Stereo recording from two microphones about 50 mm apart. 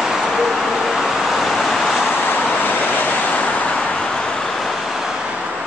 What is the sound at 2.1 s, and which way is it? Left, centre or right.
Vehicle, left.